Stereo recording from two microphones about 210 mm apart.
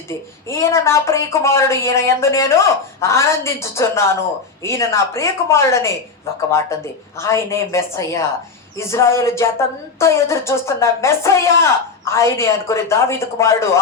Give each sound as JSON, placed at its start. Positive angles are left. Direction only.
{"t": 0.1, "sound": "speech", "side_deg": 15}